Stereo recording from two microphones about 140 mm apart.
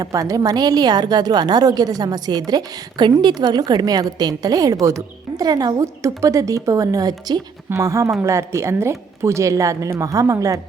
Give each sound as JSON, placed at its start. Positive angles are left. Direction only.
{"t": 0.0, "sound": "a woman's voice", "side_deg": -25}